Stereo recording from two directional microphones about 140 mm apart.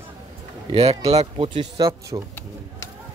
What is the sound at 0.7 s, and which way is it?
Speech, 45° right (ahead or behind).